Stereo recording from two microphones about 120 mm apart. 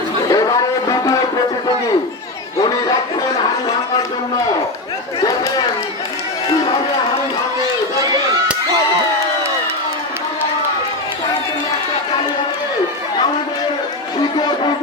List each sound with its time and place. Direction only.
0.3 s speech: 30° left (ahead or behind)